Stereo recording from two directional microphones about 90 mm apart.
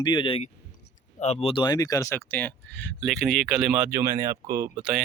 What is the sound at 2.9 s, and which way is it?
Speech, 5° left (ahead or behind).